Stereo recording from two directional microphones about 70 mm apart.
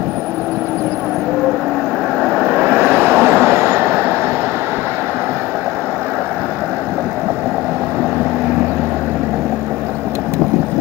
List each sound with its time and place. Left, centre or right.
2.2 s vehicle: centre
2.5 s vehicle: right